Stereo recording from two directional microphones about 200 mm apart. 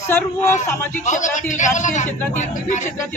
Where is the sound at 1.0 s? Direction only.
40° left (ahead or behind).